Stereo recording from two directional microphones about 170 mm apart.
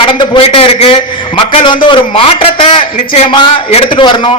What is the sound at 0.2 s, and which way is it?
A man's voice, 30° left (ahead or behind).